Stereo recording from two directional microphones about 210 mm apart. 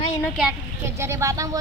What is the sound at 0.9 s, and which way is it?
Speech, 10° right (ahead or behind).